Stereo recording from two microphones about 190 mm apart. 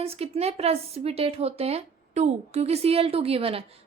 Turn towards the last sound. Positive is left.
turn(degrees=-30)  # may be behind; listen again after turning